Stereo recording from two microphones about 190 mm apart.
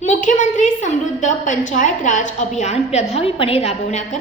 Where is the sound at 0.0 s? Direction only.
40° left (ahead or behind).